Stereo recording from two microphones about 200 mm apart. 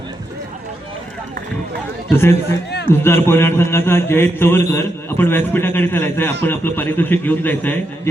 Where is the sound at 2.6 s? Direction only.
55° left (ahead or behind).